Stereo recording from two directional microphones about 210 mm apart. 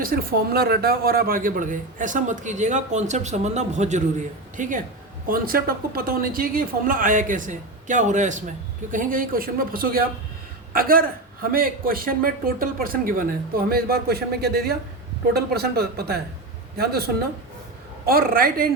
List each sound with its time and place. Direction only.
0.0 s a woman's voice: 45° right (ahead or behind)